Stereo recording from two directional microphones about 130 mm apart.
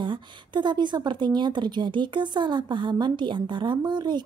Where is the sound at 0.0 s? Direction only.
35° right (ahead or behind).